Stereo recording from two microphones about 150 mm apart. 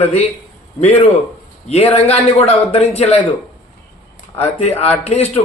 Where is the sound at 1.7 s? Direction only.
45° left (ahead or behind).